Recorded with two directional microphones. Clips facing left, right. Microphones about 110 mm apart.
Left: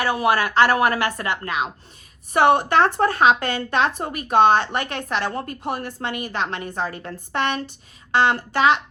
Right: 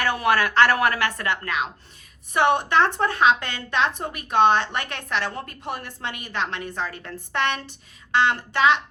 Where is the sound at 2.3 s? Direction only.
45° left (ahead or behind).